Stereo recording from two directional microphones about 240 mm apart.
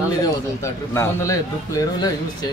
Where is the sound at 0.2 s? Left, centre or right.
Centre.